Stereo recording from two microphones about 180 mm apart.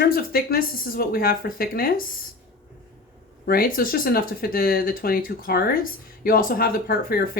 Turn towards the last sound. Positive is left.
turn(degrees=55)  # may be behind; listen again after turning